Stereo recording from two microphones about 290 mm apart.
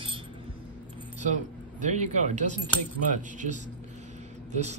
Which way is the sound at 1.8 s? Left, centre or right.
Right.